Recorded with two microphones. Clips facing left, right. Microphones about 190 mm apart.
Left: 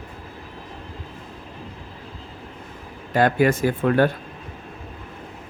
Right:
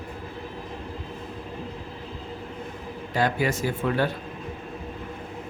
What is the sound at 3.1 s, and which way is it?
Speech, 55° left (ahead or behind).